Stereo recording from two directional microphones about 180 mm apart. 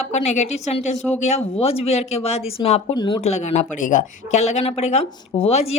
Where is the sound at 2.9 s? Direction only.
25° left (ahead or behind).